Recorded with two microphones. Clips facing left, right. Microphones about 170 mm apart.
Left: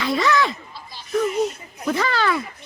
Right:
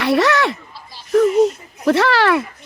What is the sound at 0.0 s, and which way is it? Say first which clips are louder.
Speech: right 4 dB; 75° right (ahead or behind).